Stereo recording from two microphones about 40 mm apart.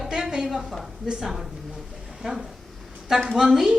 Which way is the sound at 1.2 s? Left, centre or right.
Centre.